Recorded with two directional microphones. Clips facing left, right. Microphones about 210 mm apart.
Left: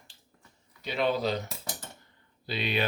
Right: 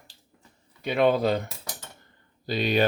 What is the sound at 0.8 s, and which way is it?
Speech, 55° right (ahead or behind).